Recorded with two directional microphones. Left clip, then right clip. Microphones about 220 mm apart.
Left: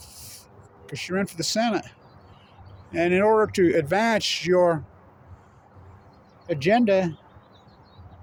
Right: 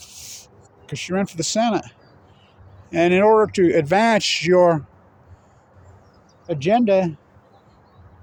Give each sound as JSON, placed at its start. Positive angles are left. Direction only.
{"t": 0.0, "sound": "a sound", "side_deg": -35}
{"t": 0.9, "sound": "speech", "side_deg": -25}
{"t": 2.9, "sound": "speech", "side_deg": -35}
{"t": 6.5, "sound": "speech", "side_deg": -20}